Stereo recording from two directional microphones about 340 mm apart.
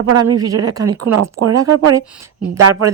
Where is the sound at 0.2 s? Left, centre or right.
Centre.